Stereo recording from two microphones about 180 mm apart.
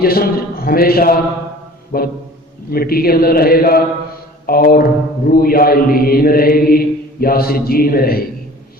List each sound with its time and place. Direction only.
0.0 s mantra: 55° left (ahead or behind)